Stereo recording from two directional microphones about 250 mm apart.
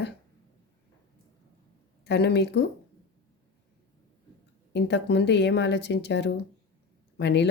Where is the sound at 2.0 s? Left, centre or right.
Left.